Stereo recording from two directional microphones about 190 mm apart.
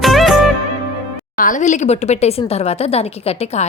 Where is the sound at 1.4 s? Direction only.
40° left (ahead or behind).